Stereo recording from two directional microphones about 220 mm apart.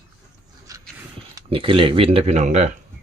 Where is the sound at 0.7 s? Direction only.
15° right (ahead or behind).